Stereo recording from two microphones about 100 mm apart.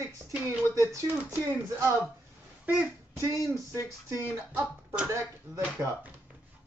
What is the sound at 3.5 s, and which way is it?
Speech, 30° right (ahead or behind).